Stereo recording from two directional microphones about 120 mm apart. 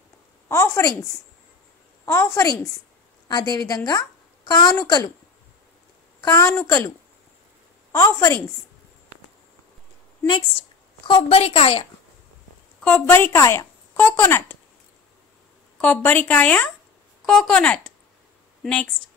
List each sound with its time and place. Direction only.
0.5 s a sound: 20° left (ahead or behind)
2.0 s a woman's voice: 20° left (ahead or behind)
3.3 s a woman's voice: 35° left (ahead or behind)
6.2 s a woman's voice: 25° left (ahead or behind)
7.9 s a woman's voice: 25° left (ahead or behind)
11.1 s a woman's voice: 50° left (ahead or behind)
12.8 s speech: 15° left (ahead or behind)
15.8 s a woman's voice: 15° left (ahead or behind)